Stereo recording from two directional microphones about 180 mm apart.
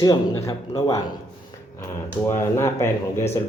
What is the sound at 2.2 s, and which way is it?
Speech, 15° left (ahead or behind).